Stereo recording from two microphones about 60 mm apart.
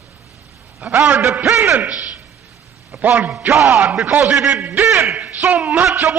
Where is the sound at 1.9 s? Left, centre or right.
Centre.